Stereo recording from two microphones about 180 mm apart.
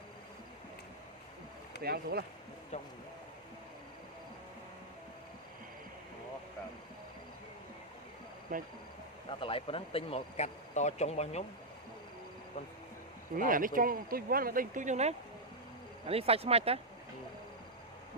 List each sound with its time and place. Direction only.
1.8 s speech: 60° right (ahead or behind)
8.5 s speech: 50° right (ahead or behind)
9.3 s speech: 30° left (ahead or behind)
13.3 s speech: 50° right (ahead or behind); by 16.8 s 35° right (ahead or behind)